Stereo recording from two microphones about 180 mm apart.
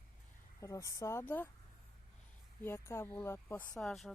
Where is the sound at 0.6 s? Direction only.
15° left (ahead or behind).